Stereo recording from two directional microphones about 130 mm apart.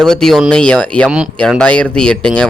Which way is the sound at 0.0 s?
5° left (ahead or behind).